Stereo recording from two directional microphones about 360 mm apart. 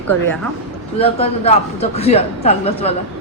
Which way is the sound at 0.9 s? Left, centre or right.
Centre.